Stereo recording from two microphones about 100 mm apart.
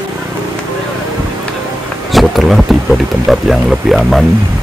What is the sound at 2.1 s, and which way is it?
Speech, centre (ahead or behind).